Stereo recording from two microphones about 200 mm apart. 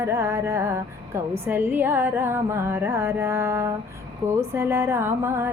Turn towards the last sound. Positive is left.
turn(degrees=-10)  # may be behind; listen again after turning